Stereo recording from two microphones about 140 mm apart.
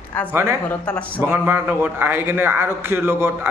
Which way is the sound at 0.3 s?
15° right (ahead or behind).